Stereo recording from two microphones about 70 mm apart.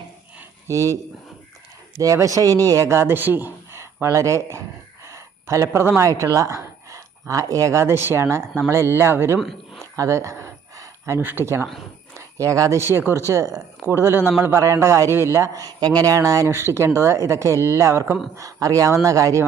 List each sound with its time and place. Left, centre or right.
0.7 s speech: right
2.2 s speech: right
5.0 s a sound: right
6.0 s speech: right
9.4 s a sound: centre
9.9 s speech: right
10.8 s a sound: right
11.2 s speech: right
12.1 s a sound: right
12.8 s speech: right
13.1 s speech: right
15.5 s speech: right
16.6 s speech: right
18.3 s speech: right